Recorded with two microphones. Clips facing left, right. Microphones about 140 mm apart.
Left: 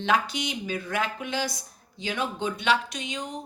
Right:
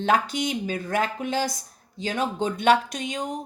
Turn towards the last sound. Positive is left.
turn(degrees=-50)  # may be behind; listen again after turning